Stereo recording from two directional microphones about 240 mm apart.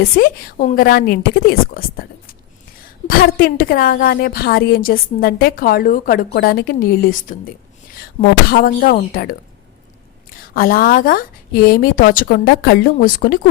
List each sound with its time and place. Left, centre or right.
0.0 s a woman's voice: left
8.4 s a woman's voice: left
10.5 s a woman's voice: left